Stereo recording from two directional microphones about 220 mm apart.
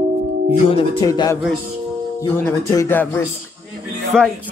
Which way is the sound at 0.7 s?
25° left (ahead or behind).